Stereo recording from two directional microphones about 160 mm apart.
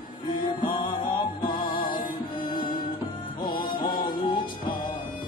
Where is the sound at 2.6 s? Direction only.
25° left (ahead or behind).